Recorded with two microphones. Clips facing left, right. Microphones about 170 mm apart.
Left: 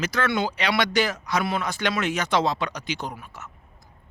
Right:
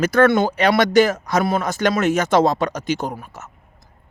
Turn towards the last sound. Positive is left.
turn(degrees=-45)  # may be behind; listen again after turning